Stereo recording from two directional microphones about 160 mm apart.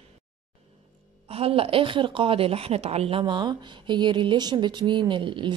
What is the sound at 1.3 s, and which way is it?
A woman's voice, 35° right (ahead or behind).